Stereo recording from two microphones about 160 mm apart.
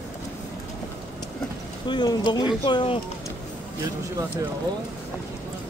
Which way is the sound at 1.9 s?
25° left (ahead or behind).